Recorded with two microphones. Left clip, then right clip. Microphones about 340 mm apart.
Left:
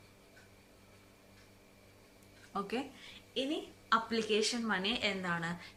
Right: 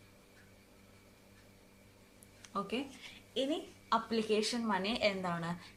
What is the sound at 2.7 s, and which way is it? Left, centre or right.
A woman's voice, centre.